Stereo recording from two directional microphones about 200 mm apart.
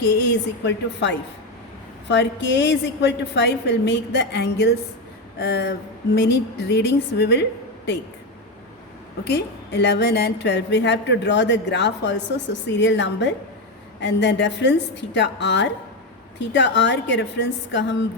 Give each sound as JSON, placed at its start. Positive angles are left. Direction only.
{"t": 0.0, "sound": "a woman's voice", "side_deg": 55}
{"t": 9.2, "sound": "a woman's voice", "side_deg": 55}